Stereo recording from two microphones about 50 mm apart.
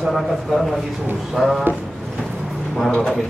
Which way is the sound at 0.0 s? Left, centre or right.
Centre.